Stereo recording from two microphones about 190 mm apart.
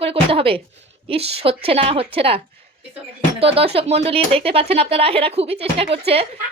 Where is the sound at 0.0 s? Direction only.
30° right (ahead or behind).